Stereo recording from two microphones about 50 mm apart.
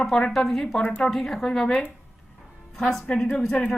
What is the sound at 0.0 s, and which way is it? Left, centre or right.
Speech, centre.